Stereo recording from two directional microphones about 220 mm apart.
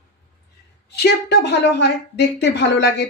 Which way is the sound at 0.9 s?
50° left (ahead or behind).